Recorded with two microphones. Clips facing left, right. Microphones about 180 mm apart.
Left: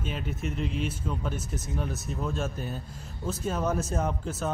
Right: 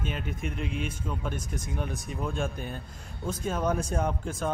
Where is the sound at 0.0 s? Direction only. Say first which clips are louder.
Even; 5° left (ahead or behind).